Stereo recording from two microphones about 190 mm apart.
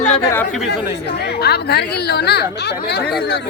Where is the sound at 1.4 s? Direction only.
55° left (ahead or behind).